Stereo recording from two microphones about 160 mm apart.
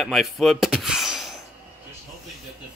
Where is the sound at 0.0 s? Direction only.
Centre (ahead or behind).